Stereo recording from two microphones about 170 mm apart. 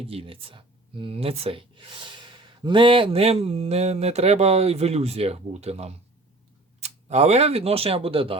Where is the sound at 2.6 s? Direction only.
30° right (ahead or behind).